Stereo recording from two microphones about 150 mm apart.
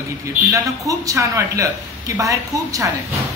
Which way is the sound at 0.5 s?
20° right (ahead or behind).